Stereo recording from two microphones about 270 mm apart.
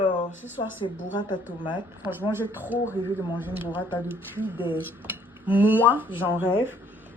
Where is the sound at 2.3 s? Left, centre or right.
Centre.